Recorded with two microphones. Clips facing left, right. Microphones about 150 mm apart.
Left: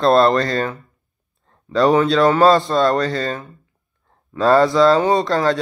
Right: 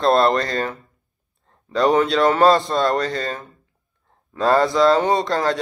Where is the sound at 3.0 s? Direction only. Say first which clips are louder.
Left 3 dB; 30° left (ahead or behind).